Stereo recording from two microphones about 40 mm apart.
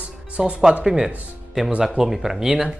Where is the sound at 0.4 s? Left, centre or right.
Centre.